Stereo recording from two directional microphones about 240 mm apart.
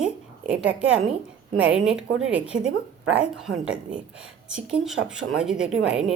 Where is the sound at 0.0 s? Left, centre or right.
Centre.